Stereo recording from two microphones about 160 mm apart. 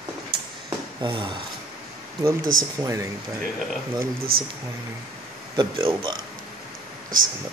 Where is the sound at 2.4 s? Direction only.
60° right (ahead or behind).